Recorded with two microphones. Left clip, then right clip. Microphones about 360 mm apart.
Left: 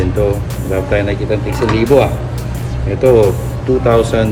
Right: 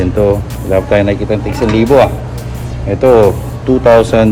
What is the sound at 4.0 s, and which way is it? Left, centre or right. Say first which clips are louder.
Speech: right 4 dB; right.